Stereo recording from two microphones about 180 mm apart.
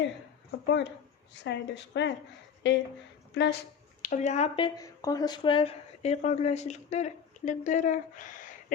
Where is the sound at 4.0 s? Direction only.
45° left (ahead or behind).